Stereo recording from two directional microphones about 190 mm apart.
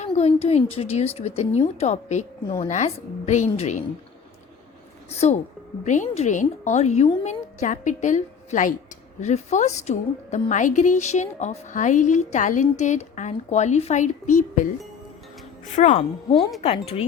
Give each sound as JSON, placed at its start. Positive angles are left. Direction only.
{"t": 0.0, "sound": "a woman's voice", "side_deg": 35}
{"t": 5.1, "sound": "a woman's voice", "side_deg": 35}
{"t": 15.7, "sound": "a woman's voice", "side_deg": 35}